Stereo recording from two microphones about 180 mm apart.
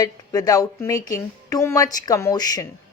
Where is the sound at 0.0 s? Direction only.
20° left (ahead or behind).